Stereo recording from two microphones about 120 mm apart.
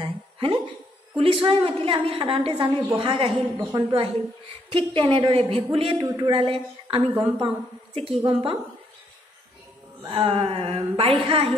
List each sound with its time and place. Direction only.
0.0 s a sound: 40° right (ahead or behind)
1.1 s a woman's voice: 50° right (ahead or behind)
3.3 s a woman's voice: 5° right (ahead or behind)
3.9 s a woman's voice: 50° right (ahead or behind)
6.0 s speech: 35° right (ahead or behind)
6.3 s a woman's voice: 50° right (ahead or behind)
10.1 s a woman's voice: 50° right (ahead or behind)